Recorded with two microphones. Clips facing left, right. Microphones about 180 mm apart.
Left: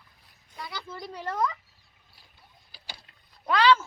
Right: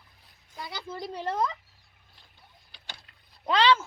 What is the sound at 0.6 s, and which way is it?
Speech, 25° right (ahead or behind).